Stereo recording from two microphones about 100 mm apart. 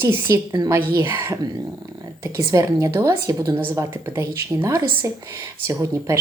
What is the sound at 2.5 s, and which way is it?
Speech, 35° right (ahead or behind).